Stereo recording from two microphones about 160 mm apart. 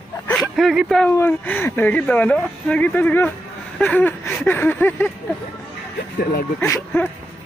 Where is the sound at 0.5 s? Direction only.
Centre (ahead or behind).